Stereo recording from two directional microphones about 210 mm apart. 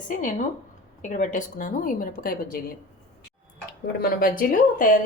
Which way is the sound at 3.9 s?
45° left (ahead or behind).